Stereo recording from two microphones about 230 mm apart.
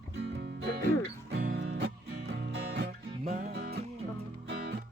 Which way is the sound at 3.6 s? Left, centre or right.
Right.